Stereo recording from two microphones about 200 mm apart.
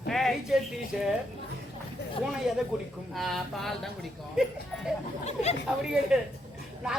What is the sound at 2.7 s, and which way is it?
A man's voice, centre (ahead or behind).